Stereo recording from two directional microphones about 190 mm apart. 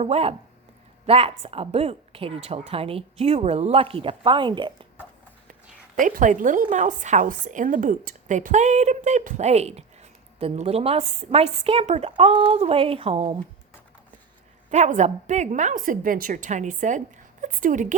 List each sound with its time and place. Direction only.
0.0 s a woman's voice: 30° right (ahead or behind)
6.0 s a woman's voice: 45° right (ahead or behind)
14.7 s a woman's voice: 40° right (ahead or behind)